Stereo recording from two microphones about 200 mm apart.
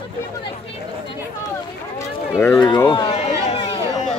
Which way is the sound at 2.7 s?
20° left (ahead or behind).